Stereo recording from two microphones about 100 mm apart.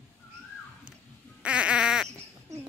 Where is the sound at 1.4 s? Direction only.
10° right (ahead or behind).